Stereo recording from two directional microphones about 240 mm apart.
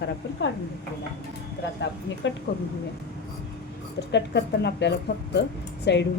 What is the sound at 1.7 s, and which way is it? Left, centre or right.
Speech, left.